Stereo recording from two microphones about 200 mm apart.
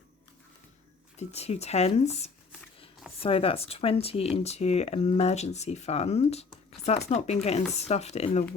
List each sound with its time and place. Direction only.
1.1 s speech: 30° left (ahead or behind)